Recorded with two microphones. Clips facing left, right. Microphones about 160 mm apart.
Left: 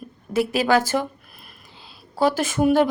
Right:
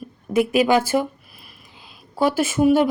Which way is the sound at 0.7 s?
10° right (ahead or behind).